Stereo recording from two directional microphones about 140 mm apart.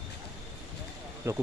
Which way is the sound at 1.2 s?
20° right (ahead or behind).